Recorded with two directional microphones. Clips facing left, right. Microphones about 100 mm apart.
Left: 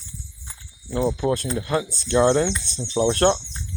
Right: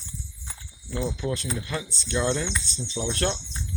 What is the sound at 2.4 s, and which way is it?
Speech, 65° left (ahead or behind).